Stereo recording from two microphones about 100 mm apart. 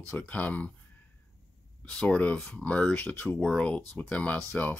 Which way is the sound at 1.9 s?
10° left (ahead or behind).